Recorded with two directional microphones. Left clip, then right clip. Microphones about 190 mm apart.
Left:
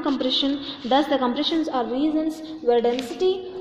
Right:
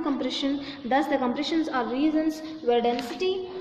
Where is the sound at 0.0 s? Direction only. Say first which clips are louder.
Left 5 dB; 10° left (ahead or behind).